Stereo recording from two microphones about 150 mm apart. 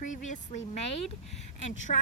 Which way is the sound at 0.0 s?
55° left (ahead or behind).